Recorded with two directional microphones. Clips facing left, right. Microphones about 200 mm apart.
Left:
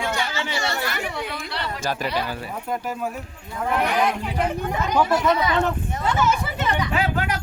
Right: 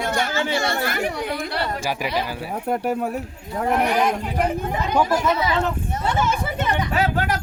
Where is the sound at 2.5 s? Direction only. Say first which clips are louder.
Right 8 dB; 60° right (ahead or behind).